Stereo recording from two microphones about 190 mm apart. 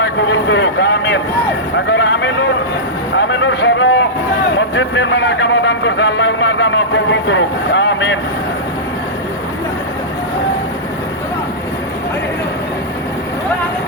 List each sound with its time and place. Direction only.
0.0 s a man's voice: 75° left (ahead or behind)